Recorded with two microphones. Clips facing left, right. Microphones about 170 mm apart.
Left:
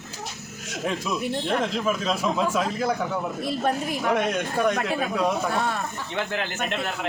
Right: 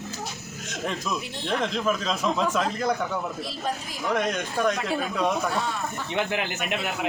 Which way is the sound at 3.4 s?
55° left (ahead or behind).